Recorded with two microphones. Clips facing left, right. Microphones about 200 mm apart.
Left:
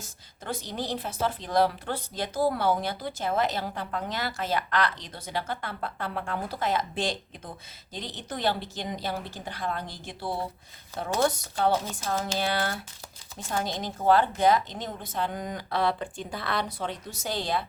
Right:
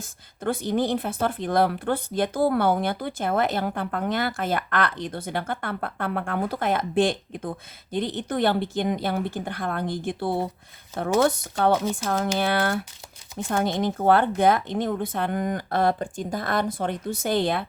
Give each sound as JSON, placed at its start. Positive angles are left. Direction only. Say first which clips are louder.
{"t": 0.0, "sound": "speech", "louder": "right 13 dB", "side_deg": -55}